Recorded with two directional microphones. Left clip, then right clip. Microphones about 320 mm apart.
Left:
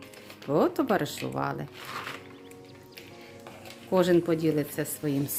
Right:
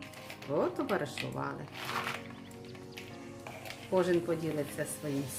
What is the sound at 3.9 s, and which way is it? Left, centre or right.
Speech, left.